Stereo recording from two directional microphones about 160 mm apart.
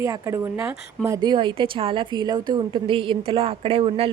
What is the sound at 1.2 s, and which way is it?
A woman's voice, 30° right (ahead or behind).